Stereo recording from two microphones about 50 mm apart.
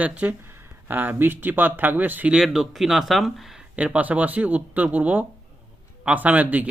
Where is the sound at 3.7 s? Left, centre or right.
Right.